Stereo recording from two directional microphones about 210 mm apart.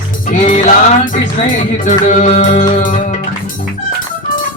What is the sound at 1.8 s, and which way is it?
Music, 35° left (ahead or behind).